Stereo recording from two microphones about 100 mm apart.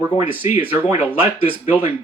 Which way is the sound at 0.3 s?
20° right (ahead or behind).